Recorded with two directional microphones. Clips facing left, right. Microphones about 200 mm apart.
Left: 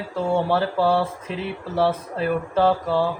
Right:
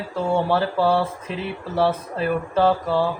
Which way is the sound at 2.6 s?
50° left (ahead or behind).